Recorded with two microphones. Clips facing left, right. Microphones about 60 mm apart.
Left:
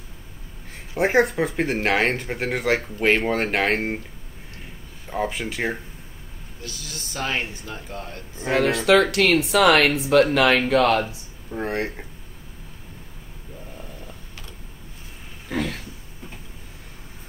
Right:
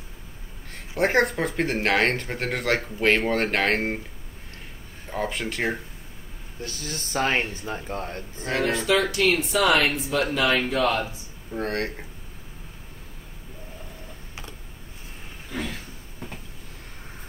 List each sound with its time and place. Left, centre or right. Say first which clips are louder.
0.9 s speech: left 2 dB; centre
5.1 s speech: left 2 dB; centre
6.6 s speech: right 3 dB; right
8.5 s speech: left 5 dB; left
11.1 s speech: left 1 dB; centre
15.5 s a sound: left 5 dB; left